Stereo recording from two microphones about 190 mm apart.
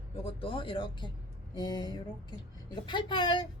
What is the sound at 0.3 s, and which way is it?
A woman's voice, 30° left (ahead or behind).